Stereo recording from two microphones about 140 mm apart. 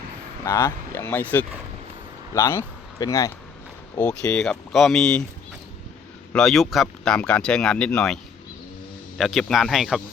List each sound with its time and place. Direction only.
0.4 s speech: 20° left (ahead or behind)
3.9 s speech: 10° left (ahead or behind)
6.3 s speech: centre (ahead or behind)